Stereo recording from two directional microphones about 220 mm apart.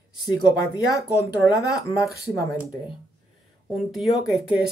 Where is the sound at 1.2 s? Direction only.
15° left (ahead or behind).